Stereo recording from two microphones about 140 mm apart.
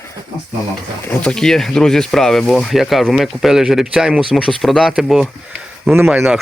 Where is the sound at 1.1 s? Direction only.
10° left (ahead or behind).